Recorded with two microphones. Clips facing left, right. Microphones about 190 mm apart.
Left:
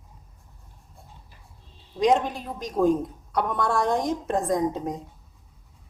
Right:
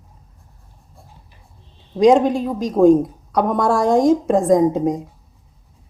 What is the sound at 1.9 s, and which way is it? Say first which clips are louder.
Speech: right 9 dB; 90° right.